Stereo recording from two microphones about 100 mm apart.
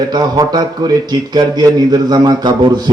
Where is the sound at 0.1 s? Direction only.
45° right (ahead or behind).